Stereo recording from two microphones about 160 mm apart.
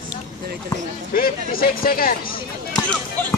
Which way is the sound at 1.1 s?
65° left (ahead or behind).